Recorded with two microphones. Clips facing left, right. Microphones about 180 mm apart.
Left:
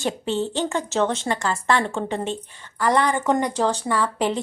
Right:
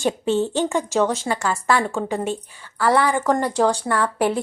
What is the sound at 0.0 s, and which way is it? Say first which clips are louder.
A woman's voice: right 4 dB; 15° right (ahead or behind).